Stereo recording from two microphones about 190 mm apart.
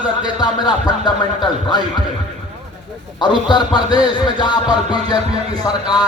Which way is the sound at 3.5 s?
25° left (ahead or behind).